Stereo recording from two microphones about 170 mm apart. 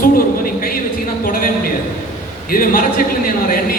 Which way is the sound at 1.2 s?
55° left (ahead or behind).